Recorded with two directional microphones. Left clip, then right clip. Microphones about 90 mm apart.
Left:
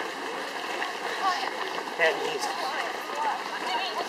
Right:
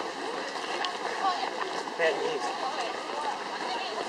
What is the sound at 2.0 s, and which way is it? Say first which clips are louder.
Speech: left 3 dB; 45° left (ahead or behind).